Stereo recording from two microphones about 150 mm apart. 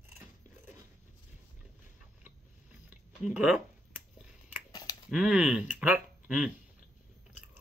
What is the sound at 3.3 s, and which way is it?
Speech, 5° right (ahead or behind).